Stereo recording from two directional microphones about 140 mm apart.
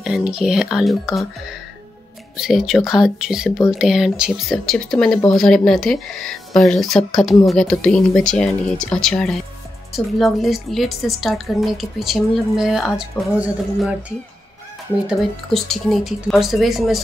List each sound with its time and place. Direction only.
0.0 s a woman's voice: 5° right (ahead or behind)
2.3 s a woman's voice: 5° right (ahead or behind)
15.0 s a woman's voice: centre (ahead or behind)